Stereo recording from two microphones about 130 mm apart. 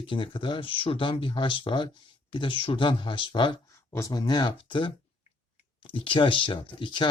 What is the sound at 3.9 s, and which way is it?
Speech, 25° left (ahead or behind).